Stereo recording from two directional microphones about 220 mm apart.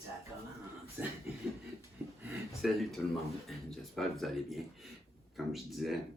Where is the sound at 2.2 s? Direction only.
Centre (ahead or behind).